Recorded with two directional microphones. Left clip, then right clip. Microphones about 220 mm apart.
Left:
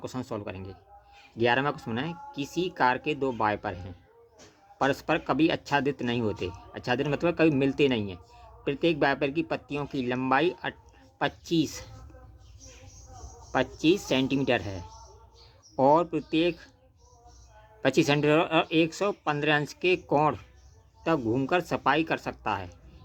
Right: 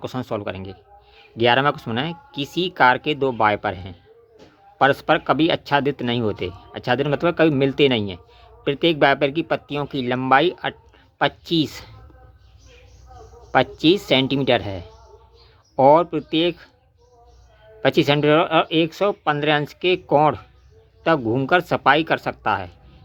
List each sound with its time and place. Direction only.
0.0 s speech: 25° right (ahead or behind)
13.5 s speech: 25° right (ahead or behind)
17.8 s speech: 20° right (ahead or behind)